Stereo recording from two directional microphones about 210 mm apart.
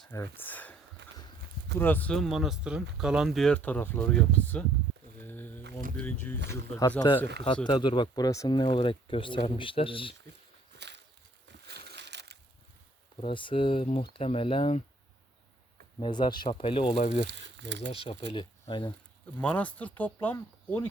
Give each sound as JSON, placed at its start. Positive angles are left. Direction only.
{"t": 0.0, "sound": "speech", "side_deg": 10}
{"t": 1.8, "sound": "speech", "side_deg": 10}
{"t": 5.1, "sound": "a sound", "side_deg": 10}
{"t": 6.0, "sound": "speech", "side_deg": 5}
{"t": 10.8, "sound": "a sound", "side_deg": -55}
{"t": 11.7, "sound": "crushing", "side_deg": -50}
{"t": 13.2, "sound": "speech", "side_deg": 25}
{"t": 16.0, "sound": "speech", "side_deg": 20}
{"t": 17.2, "sound": "speech", "side_deg": -60}
{"t": 17.9, "sound": "speech", "side_deg": 25}
{"t": 19.4, "sound": "speech", "side_deg": 5}